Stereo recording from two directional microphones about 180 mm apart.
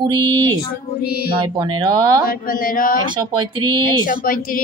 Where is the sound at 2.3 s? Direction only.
50° left (ahead or behind).